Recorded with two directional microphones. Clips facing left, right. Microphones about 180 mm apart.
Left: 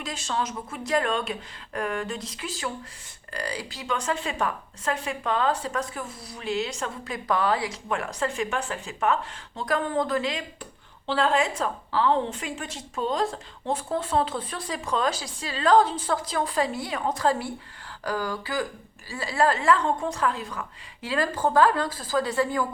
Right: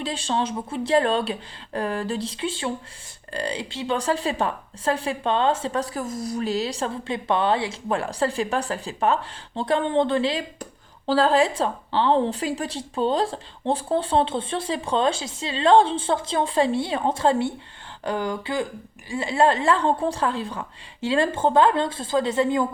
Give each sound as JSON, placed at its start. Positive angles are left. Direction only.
{"t": 0.0, "sound": "a woman's voice", "side_deg": -30}